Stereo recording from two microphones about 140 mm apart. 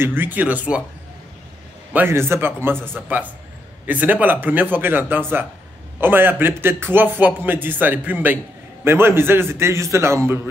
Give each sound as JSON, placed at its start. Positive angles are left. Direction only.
{"t": 0.0, "sound": "a man's voice", "side_deg": -15}
{"t": 2.0, "sound": "a man's voice", "side_deg": -15}